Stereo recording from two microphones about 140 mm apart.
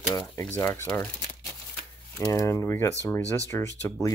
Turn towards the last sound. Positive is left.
turn(degrees=20)  # may be behind; listen again after turning